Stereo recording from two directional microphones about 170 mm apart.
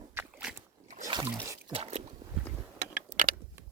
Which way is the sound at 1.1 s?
25° right (ahead or behind).